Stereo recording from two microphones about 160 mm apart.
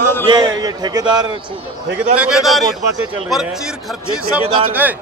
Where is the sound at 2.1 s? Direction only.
5° right (ahead or behind).